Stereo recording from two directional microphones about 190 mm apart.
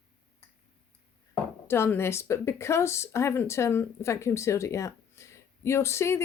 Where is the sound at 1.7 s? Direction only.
10° left (ahead or behind).